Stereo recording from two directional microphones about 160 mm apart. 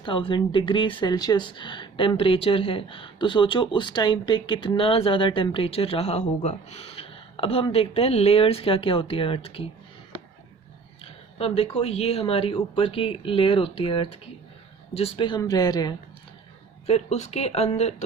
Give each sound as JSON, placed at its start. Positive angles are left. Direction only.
{"t": 0.0, "sound": "speech", "side_deg": 30}
{"t": 11.0, "sound": "speech", "side_deg": 35}
{"t": 16.8, "sound": "speech", "side_deg": 40}